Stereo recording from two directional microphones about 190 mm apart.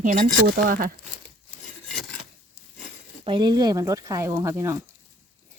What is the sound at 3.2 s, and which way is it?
Speech, 25° right (ahead or behind).